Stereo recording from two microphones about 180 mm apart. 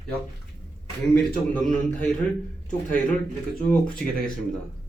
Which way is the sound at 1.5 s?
5° left (ahead or behind).